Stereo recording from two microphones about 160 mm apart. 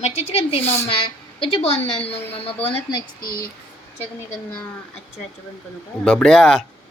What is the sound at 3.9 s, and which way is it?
Speech, 15° left (ahead or behind).